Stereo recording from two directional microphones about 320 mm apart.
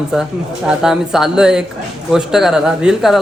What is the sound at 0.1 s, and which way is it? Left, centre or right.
Speech, centre.